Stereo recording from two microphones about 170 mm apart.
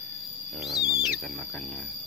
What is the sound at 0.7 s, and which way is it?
Speech, 5° right (ahead or behind).